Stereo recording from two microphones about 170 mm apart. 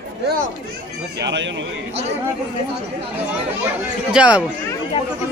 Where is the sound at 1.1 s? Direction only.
90° right.